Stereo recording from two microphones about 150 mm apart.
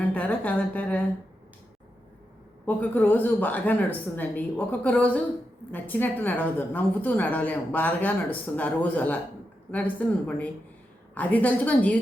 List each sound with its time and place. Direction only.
0.1 s speech: 10° left (ahead or behind)
2.6 s a woman's voice: 10° left (ahead or behind)